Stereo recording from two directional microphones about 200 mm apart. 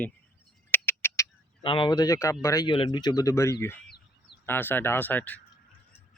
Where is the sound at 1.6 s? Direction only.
25° left (ahead or behind); by 5.3 s 10° left (ahead or behind).